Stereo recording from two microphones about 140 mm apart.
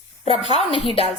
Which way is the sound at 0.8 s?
45° left (ahead or behind).